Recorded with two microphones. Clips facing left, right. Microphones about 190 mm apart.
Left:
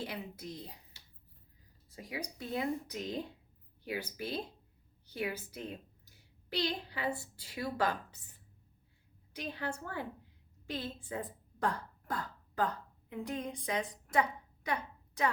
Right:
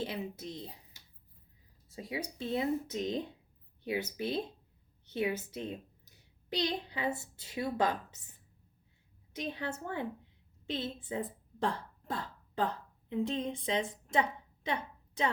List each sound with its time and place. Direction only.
0.0 s a woman's voice: 25° right (ahead or behind)
9.3 s a woman's voice: 20° right (ahead or behind)